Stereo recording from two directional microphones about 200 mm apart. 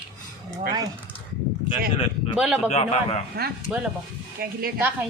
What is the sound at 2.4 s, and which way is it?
Speech, 5° right (ahead or behind).